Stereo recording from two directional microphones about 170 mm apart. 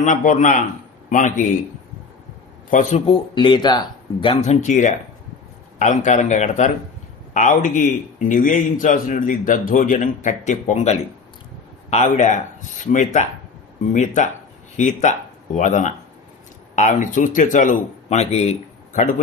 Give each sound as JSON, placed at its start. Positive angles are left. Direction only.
{"t": 0.0, "sound": "speech", "side_deg": 45}
{"t": 2.7, "sound": "speech", "side_deg": 45}
{"t": 3.1, "sound": "speech", "side_deg": 25}
{"t": 4.6, "sound": "speech", "side_deg": 45}